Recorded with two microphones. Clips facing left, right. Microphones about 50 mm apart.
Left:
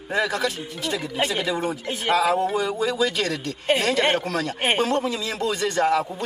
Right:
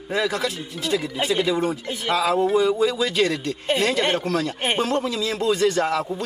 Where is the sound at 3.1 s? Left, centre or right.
Right.